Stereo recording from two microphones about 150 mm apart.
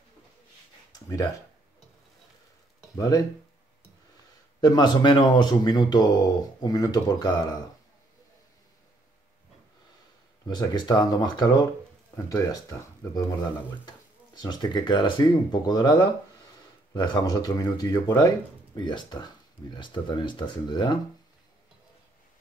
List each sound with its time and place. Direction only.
0.9 s a sound: 25° left (ahead or behind)
3.0 s speech: 25° left (ahead or behind)
4.6 s speech: 30° left (ahead or behind)
10.5 s speech: 30° left (ahead or behind)
14.3 s speech: 30° left (ahead or behind)